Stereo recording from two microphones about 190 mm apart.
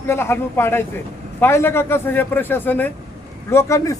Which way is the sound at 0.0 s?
10° left (ahead or behind).